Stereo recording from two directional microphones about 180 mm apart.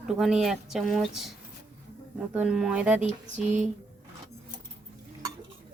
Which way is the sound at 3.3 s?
40° right (ahead or behind).